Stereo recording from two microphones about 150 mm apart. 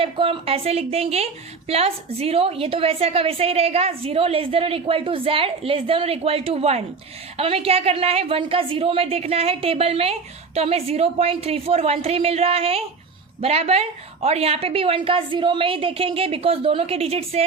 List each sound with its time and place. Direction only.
0.0 s a woman's voice: 35° right (ahead or behind)